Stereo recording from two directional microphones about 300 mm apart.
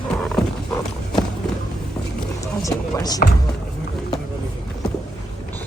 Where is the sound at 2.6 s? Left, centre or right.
Centre.